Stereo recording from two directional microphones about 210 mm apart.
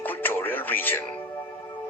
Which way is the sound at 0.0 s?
10° left (ahead or behind).